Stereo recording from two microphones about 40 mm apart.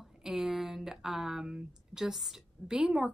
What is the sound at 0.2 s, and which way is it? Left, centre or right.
Speech, centre.